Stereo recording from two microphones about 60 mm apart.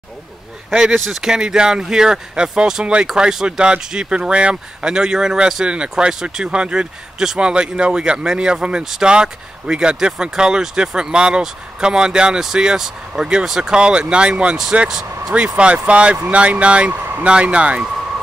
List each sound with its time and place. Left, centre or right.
0.9 s speech: centre
15.3 s speech: centre